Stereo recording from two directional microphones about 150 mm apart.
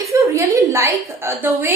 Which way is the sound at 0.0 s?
20° right (ahead or behind).